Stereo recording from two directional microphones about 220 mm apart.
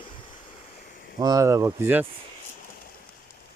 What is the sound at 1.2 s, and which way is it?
Speech, 15° right (ahead or behind).